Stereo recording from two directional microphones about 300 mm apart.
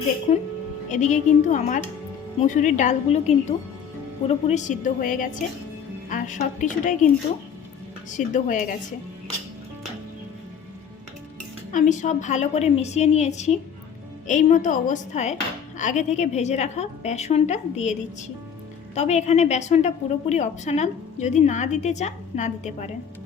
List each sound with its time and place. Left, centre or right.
0.3 s a woman's voice: left
8.1 s a woman's voice: left
11.7 s a woman's voice: left